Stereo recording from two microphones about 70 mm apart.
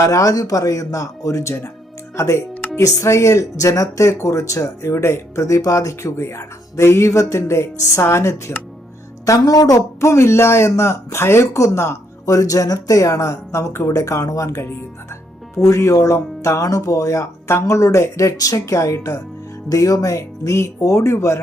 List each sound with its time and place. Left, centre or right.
0.0 s speech: left
9.2 s speech: left